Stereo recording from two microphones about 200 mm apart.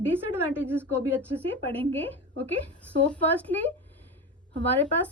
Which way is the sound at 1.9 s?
10° left (ahead or behind).